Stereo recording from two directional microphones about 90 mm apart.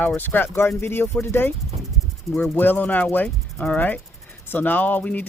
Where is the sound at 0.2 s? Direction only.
20° left (ahead or behind).